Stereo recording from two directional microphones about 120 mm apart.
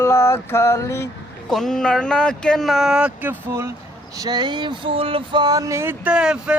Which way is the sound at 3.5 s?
25° right (ahead or behind).